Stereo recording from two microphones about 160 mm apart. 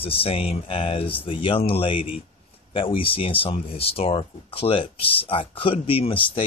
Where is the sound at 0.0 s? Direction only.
35° left (ahead or behind).